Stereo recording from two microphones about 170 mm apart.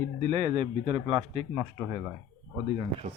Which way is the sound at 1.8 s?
20° right (ahead or behind).